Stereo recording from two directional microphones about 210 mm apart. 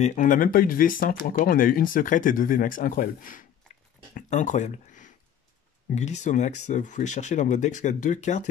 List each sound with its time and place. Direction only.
0.0 s speech: 35° left (ahead or behind)